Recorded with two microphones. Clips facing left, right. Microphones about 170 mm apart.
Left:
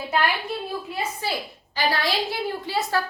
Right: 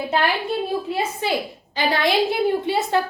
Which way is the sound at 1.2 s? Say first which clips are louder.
Right 6 dB; 20° right (ahead or behind).